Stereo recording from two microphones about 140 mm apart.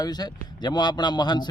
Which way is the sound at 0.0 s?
30° left (ahead or behind).